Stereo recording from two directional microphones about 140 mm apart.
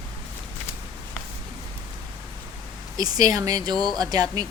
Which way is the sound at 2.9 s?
25° right (ahead or behind).